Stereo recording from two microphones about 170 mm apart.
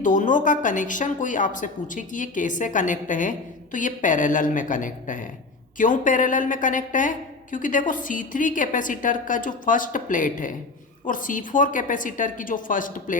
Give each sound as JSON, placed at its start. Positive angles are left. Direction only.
{"t": 0.0, "sound": "a woman's voice", "side_deg": 50}